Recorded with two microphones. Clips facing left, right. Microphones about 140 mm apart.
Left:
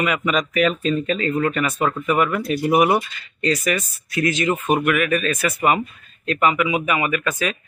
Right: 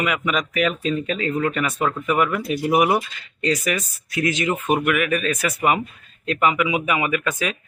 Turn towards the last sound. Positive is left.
turn(degrees=-15)  # may be behind; listen again after turning